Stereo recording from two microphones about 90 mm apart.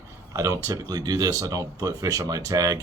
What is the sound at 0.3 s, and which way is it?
A man's voice, 35° right (ahead or behind).